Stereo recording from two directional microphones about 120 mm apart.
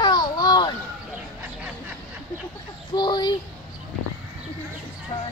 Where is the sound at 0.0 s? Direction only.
35° left (ahead or behind).